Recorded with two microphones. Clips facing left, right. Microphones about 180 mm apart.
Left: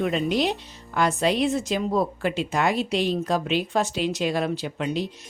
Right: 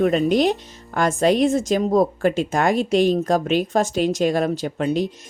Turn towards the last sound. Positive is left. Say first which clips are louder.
# right 6 dB
turn(degrees=-45)  # may be behind; listen again after turning